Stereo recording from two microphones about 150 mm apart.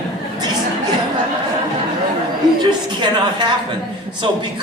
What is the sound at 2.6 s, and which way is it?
A woman's voice, 30° right (ahead or behind).